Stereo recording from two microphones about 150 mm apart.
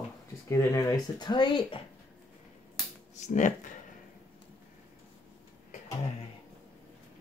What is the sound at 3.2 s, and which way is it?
Speech, 55° left (ahead or behind).